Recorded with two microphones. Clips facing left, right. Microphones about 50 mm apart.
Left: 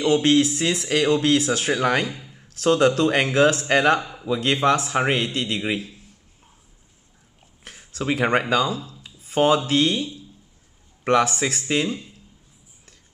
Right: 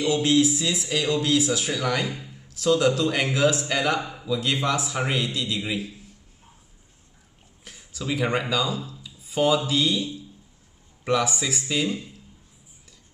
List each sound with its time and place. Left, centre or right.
0.0 s speech: left
2.0 s speech: centre
2.4 s speech: left
4.0 s a man's voice: centre
4.3 s speech: left
7.6 s speech: left
9.0 s a sound: left
9.7 s speech: left
11.1 s speech: left